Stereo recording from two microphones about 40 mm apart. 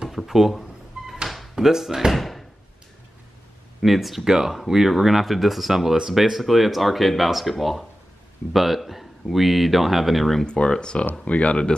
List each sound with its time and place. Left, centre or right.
0.3 s speech: centre
1.0 s a sound: centre
1.5 s speech: centre
2.1 s door: centre
3.8 s speech: centre
10.4 s speech: left